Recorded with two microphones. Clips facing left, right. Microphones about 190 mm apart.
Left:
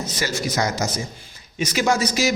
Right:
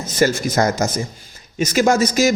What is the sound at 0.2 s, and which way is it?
A man's voice, 50° right (ahead or behind).